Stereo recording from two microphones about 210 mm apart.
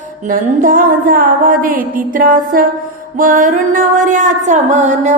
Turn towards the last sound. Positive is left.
turn(degrees=-35)  # may be behind; listen again after turning